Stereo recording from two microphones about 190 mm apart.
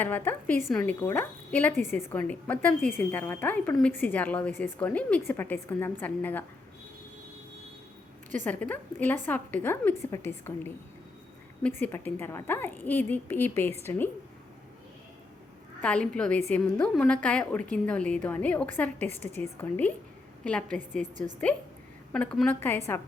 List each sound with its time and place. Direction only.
0.0 s a woman's voice: 10° left (ahead or behind)
8.4 s a woman's voice: 10° left (ahead or behind)
11.8 s a woman's voice: 10° left (ahead or behind)
15.8 s a woman's voice: 5° left (ahead or behind)
20.9 s a woman's voice: 40° right (ahead or behind)
22.1 s a woman's voice: 5° left (ahead or behind)